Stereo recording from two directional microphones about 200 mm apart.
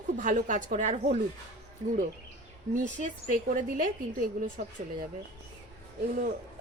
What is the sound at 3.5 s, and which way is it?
Speech, 40° right (ahead or behind).